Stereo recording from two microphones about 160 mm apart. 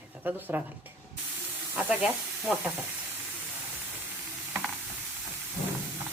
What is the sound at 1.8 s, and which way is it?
Speech, 10° right (ahead or behind).